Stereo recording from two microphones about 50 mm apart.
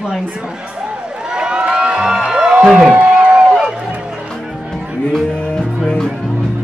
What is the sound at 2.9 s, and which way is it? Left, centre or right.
Run, right.